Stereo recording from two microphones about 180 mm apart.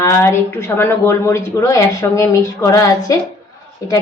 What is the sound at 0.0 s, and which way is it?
A woman's voice, 15° left (ahead or behind).